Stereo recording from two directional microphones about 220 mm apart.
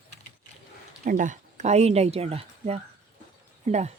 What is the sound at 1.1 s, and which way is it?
Speech, 35° right (ahead or behind).